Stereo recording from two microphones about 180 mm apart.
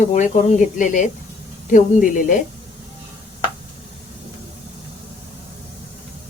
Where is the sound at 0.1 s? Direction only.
40° left (ahead or behind).